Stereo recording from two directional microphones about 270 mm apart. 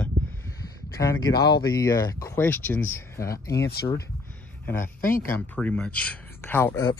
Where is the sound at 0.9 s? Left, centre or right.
Centre.